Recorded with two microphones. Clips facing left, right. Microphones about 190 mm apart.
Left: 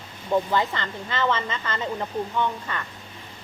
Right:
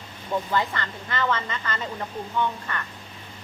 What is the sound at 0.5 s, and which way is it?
Speech, 20° left (ahead or behind).